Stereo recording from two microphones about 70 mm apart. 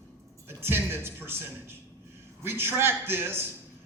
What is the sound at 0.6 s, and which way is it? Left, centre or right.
A man's voice, right.